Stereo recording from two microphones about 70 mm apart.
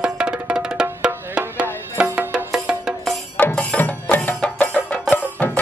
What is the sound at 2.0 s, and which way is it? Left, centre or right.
Music, right.